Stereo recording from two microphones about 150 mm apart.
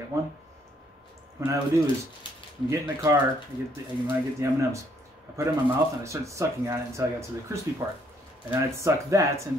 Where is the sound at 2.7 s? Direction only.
20° right (ahead or behind).